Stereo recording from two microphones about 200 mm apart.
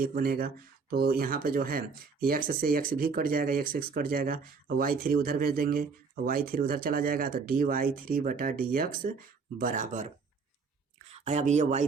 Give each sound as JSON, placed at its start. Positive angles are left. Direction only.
{"t": 0.0, "sound": "speech", "side_deg": -45}
{"t": 11.1, "sound": "speech", "side_deg": -35}